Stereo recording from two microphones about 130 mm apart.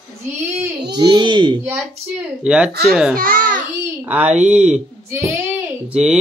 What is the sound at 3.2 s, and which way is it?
Speech, 90° right.